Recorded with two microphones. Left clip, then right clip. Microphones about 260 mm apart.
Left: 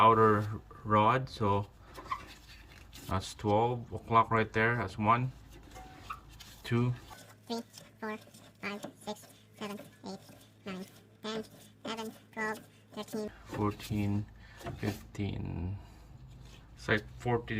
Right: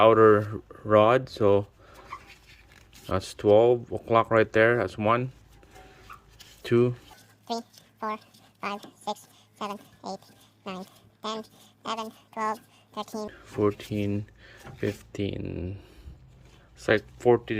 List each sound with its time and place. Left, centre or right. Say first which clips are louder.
0.0 s speech: right 6 dB; centre
3.1 s speech: right 10 dB; centre
6.6 s speech: right 12 dB; centre
9.6 s a woman's voice: right 8 dB; centre
11.2 s a woman's voice: right 5 dB; centre
16.8 s speech: right 10 dB; centre